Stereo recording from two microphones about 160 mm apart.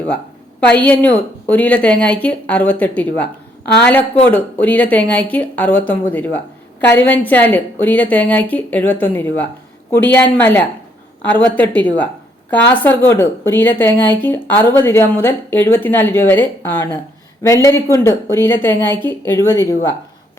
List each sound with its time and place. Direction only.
0.6 s a woman's voice: 10° left (ahead or behind)